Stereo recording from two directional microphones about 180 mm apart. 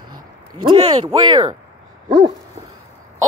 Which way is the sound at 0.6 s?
25° right (ahead or behind).